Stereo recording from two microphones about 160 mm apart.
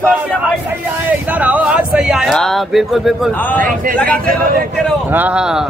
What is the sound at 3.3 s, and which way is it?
Speech, 10° left (ahead or behind).